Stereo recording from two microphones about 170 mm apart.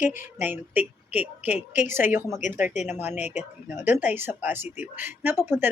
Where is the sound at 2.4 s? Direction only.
45° left (ahead or behind).